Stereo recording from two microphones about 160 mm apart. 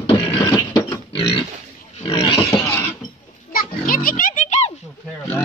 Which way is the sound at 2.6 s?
10° left (ahead or behind).